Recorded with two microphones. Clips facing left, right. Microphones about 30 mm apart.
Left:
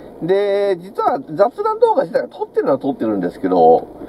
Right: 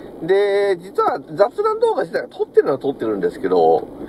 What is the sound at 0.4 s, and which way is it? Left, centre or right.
Speech, right.